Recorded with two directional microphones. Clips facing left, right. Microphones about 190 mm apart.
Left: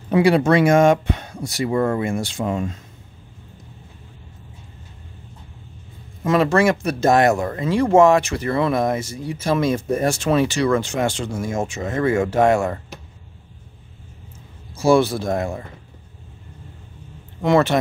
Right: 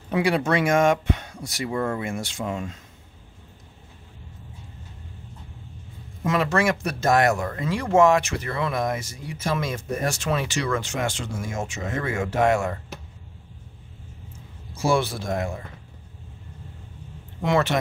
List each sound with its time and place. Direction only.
0.1 s speech: 30° left (ahead or behind)
6.2 s speech: 35° left (ahead or behind)
14.8 s speech: 35° left (ahead or behind)
17.4 s speech: 35° left (ahead or behind)